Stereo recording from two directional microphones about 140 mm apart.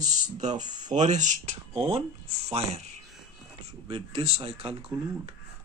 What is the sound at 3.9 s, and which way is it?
Speech, 40° right (ahead or behind).